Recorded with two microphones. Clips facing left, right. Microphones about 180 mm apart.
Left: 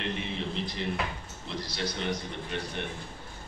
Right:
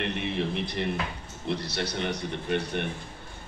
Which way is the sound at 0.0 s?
60° right (ahead or behind).